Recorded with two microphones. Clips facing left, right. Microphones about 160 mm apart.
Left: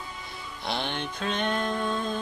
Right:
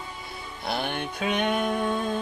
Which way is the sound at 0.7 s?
10° right (ahead or behind).